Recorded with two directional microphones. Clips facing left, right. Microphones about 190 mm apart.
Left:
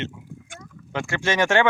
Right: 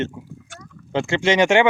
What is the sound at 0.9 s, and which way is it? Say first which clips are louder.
Speech: right 6 dB; 25° right (ahead or behind).